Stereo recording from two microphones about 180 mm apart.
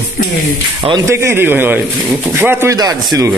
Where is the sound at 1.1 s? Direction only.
15° right (ahead or behind).